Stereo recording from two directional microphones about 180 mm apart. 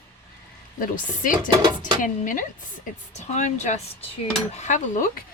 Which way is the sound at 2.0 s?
50° left (ahead or behind).